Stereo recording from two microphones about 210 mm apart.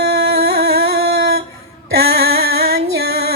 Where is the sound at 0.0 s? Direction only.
50° right (ahead or behind).